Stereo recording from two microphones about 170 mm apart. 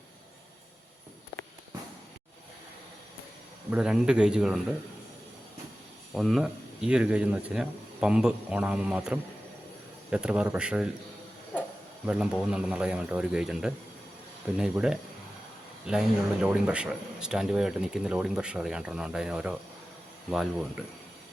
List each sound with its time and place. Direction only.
3.7 s speech: 5° right (ahead or behind)
6.1 s speech: centre (ahead or behind)
12.0 s speech: 5° right (ahead or behind)